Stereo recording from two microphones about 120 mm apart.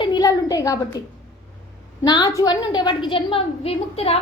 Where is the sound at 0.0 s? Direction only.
35° left (ahead or behind).